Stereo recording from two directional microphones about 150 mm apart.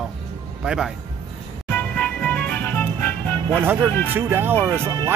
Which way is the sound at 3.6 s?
15° right (ahead or behind).